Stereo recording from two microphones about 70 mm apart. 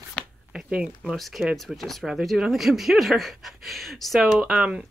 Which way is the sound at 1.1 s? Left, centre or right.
Centre.